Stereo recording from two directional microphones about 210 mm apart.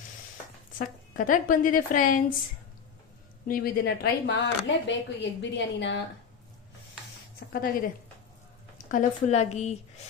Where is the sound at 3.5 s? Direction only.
45° left (ahead or behind).